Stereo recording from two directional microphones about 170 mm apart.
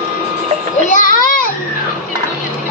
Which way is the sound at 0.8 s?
50° left (ahead or behind).